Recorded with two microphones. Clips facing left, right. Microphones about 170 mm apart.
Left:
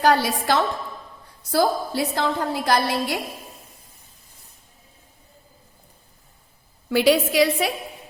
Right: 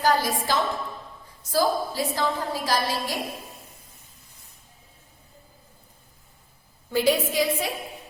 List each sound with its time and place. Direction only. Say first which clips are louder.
0.0 s a woman's voice: left 4 dB; 70° left (ahead or behind)
6.9 s a woman's voice: left 4 dB; 80° left